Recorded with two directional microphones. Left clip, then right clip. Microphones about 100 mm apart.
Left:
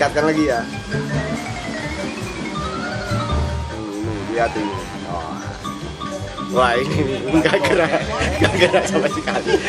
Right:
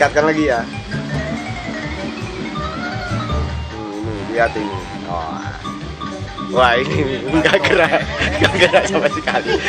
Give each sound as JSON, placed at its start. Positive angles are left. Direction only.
{"t": 0.0, "sound": "speech", "side_deg": -20}
{"t": 6.5, "sound": "speech", "side_deg": -20}